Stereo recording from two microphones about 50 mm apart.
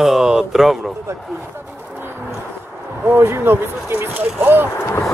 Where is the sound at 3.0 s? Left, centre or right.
Right.